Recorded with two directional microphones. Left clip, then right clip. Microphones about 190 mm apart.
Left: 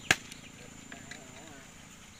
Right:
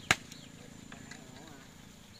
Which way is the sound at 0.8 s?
40° left (ahead or behind).